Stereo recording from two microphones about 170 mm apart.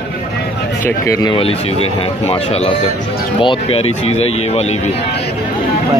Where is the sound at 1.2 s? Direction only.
30° left (ahead or behind).